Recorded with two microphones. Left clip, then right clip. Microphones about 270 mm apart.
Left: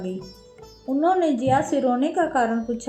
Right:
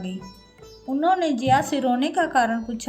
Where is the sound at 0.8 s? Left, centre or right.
Right.